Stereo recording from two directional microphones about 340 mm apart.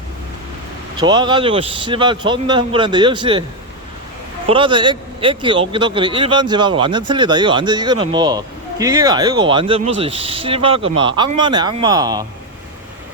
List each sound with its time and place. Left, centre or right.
0.9 s a man's voice: centre
4.4 s a man's voice: centre